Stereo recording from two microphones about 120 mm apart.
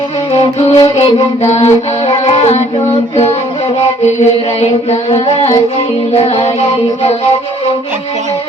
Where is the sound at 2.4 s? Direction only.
60° left (ahead or behind).